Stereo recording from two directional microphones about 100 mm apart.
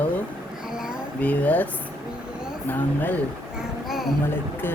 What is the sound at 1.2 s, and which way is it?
Speech, 15° left (ahead or behind).